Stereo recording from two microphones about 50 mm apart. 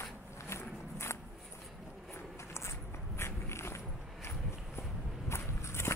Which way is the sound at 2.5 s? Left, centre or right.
Left.